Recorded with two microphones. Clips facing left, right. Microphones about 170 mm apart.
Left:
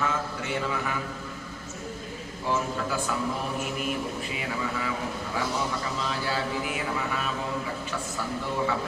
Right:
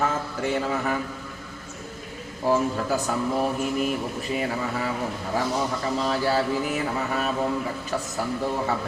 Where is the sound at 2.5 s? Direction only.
40° right (ahead or behind).